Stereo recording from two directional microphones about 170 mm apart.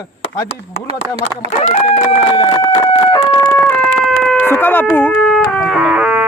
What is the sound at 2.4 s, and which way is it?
Speech, 30° left (ahead or behind).